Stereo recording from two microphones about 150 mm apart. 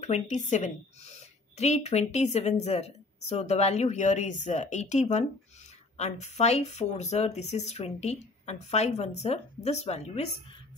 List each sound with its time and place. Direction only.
0.0 s a woman's voice: 50° left (ahead or behind)